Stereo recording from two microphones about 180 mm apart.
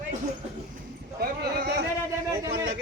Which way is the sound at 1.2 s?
60° right (ahead or behind).